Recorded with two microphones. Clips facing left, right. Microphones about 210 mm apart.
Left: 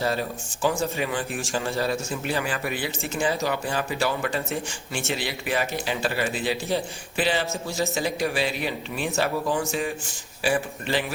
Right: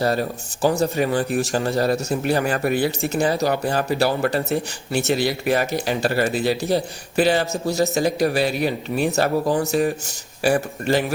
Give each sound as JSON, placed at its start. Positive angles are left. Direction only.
{"t": 0.0, "sound": "speech", "side_deg": -40}